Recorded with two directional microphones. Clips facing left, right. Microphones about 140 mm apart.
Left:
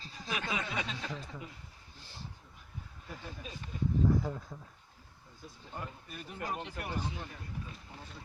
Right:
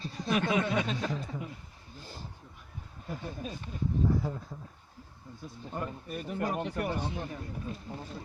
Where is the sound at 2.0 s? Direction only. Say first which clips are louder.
Right 6 dB; 45° right (ahead or behind).